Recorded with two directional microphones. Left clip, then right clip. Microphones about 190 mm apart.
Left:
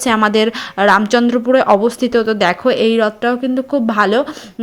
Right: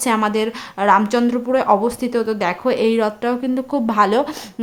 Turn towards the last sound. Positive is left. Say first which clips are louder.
# left 2 dB
turn(degrees=10)  # may be behind; listen again after turning